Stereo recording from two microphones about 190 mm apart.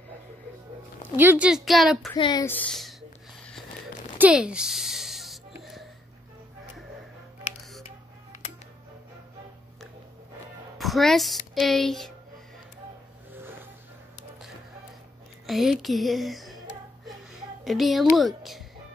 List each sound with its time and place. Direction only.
1.1 s a woman's voice: 10° right (ahead or behind)
2.0 s speech: 20° left (ahead or behind)
2.4 s speech: 5° left (ahead or behind)
4.2 s music: 5° right (ahead or behind)
5.6 s a sound: centre (ahead or behind)
10.8 s speech: centre (ahead or behind)
13.3 s a sound: 10° right (ahead or behind)
15.4 s a child's voice: centre (ahead or behind)